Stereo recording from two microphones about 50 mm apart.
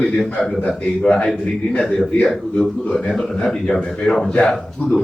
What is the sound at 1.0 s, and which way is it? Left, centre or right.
A man's voice, centre.